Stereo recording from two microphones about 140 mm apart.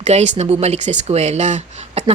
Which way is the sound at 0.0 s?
50° right (ahead or behind).